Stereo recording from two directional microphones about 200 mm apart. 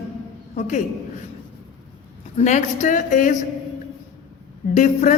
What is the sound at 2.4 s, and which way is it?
Speech, 35° left (ahead or behind).